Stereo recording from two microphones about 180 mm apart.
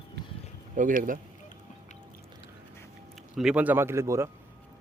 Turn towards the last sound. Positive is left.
turn(degrees=-15)  # may be behind; listen again after turning